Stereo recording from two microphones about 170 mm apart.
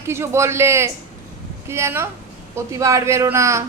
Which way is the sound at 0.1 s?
15° right (ahead or behind).